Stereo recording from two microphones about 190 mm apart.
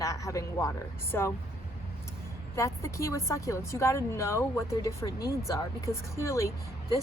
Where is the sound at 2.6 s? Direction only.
15° left (ahead or behind).